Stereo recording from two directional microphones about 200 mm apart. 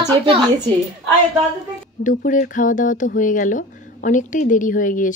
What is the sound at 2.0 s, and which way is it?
Speech, 40° left (ahead or behind).